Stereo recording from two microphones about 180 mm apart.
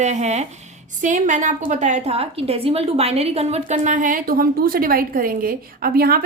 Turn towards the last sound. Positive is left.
turn(degrees=-55)  # may be behind; listen again after turning